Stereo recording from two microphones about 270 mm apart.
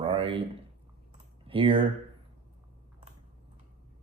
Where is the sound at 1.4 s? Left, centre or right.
Centre.